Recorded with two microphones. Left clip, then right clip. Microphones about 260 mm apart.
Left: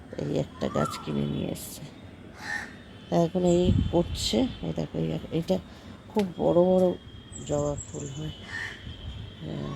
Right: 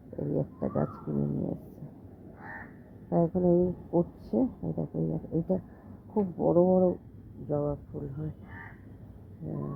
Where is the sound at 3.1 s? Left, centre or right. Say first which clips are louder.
Left 2 dB; centre.